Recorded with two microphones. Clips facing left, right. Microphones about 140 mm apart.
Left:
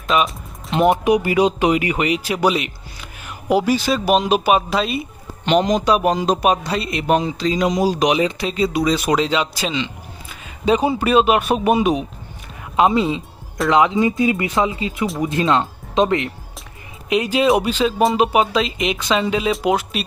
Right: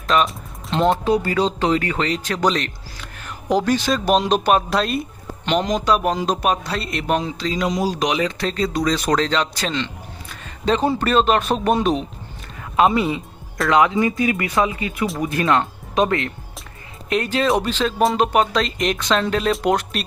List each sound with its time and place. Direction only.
0.1 s speech: 5° left (ahead or behind)
12.7 s speech: 20° left (ahead or behind); by 20.1 s 5° left (ahead or behind)